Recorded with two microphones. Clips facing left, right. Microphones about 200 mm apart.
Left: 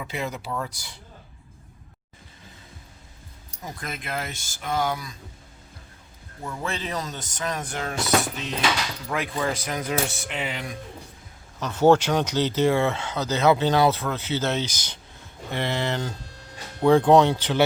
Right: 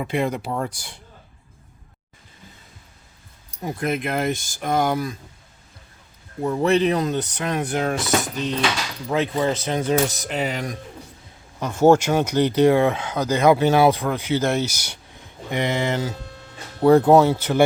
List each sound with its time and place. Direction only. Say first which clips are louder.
0.0 s speech: right 8 dB; 55° right (ahead or behind)
3.6 s speech: right 11 dB; 60° right (ahead or behind)
6.6 s speech: right 12 dB; 70° right (ahead or behind); by 8.5 s 40° right (ahead or behind)
9.0 s speech: right 7 dB; 25° right (ahead or behind); by 10.8 s 40° right (ahead or behind)
11.6 s speech: right 3 dB; 10° right (ahead or behind)